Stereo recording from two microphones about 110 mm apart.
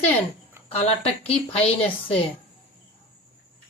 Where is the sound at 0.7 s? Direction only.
65° left (ahead or behind).